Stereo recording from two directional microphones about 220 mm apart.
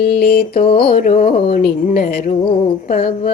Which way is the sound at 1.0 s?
35° left (ahead or behind).